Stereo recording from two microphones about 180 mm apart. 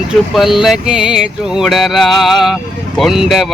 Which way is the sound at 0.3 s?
Centre (ahead or behind).